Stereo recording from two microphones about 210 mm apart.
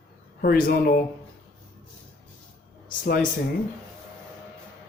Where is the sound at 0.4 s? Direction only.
45° left (ahead or behind).